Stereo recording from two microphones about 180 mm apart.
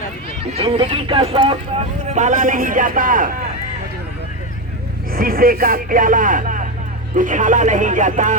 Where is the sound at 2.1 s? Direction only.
45° right (ahead or behind).